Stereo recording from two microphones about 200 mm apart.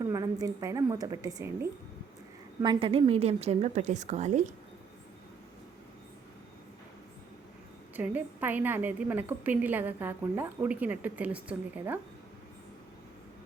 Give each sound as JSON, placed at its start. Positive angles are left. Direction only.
{"t": 0.0, "sound": "a woman's voice", "side_deg": -20}
{"t": 2.6, "sound": "a woman's voice", "side_deg": -25}
{"t": 7.9, "sound": "a woman's voice", "side_deg": -10}